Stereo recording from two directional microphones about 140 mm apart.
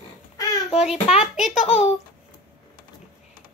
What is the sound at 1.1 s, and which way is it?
Speech, 5° right (ahead or behind).